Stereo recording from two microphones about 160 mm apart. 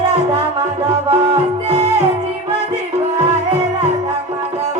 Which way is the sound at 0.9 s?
35° right (ahead or behind).